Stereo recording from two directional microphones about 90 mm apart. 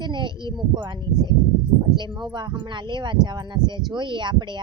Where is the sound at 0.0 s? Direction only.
60° right (ahead or behind).